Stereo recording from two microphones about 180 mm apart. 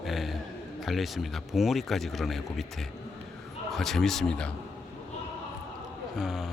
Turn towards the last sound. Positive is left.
turn(degrees=0)  # may be behind; listen again after turning